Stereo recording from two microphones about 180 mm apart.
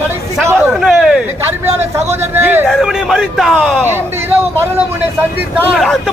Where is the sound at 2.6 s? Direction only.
Centre (ahead or behind).